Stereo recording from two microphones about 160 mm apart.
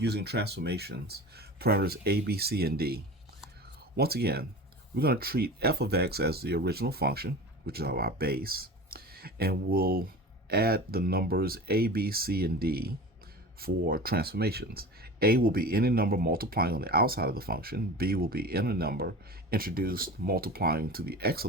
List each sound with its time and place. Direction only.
0.0 s speech: 90° right; by 21.4 s 75° right (ahead or behind)